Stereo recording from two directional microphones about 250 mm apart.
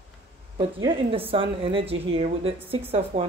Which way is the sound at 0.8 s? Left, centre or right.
Right.